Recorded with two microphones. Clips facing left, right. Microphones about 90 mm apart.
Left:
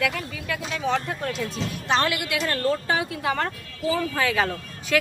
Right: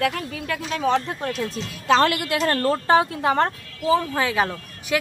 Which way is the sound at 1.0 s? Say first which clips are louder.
Right 2 dB; 30° right (ahead or behind).